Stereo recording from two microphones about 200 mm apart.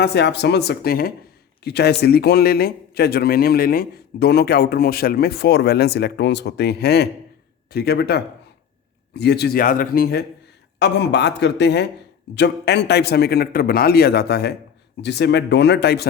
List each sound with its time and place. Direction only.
0.0 s a man's voice: 55° left (ahead or behind)